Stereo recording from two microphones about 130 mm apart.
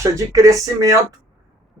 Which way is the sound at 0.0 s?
25° right (ahead or behind).